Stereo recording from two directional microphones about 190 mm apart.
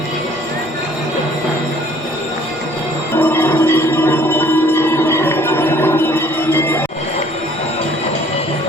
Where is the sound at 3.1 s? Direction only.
10° left (ahead or behind).